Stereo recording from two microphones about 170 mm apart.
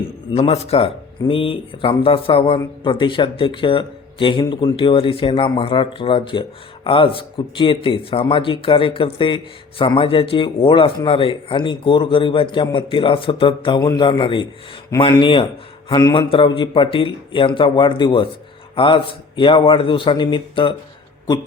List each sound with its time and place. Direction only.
0.3 s a man's voice: 35° left (ahead or behind)